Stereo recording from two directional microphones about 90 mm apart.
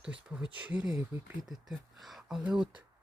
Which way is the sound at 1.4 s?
5° right (ahead or behind).